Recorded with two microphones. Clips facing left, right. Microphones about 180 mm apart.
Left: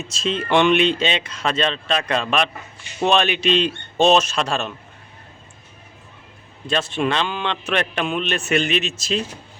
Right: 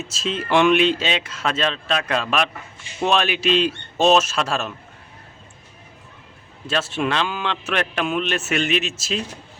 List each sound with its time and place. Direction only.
0.0 s a man's voice: 5° right (ahead or behind)
6.7 s a man's voice: 5° right (ahead or behind)